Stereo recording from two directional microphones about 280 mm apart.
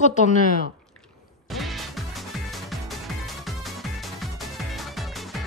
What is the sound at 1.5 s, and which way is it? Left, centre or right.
Music, centre.